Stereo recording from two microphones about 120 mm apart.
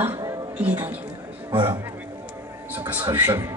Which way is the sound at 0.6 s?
15° right (ahead or behind).